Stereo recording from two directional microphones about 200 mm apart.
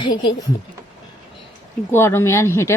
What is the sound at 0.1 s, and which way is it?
Speech, 25° left (ahead or behind).